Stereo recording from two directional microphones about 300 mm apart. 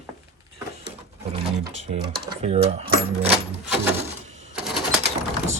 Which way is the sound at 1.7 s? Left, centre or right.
Right.